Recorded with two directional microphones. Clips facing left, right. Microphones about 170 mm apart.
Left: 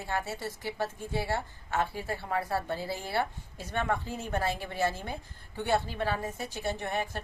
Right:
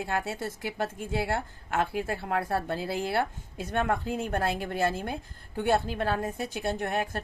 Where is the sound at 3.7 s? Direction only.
55° right (ahead or behind).